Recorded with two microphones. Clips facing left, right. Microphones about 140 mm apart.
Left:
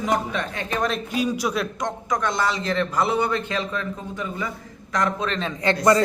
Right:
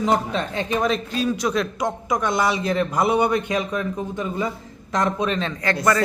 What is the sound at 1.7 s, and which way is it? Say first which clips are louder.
A man's voice: right 2 dB; 10° right (ahead or behind).